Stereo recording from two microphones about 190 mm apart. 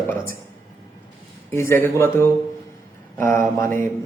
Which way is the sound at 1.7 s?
15° left (ahead or behind).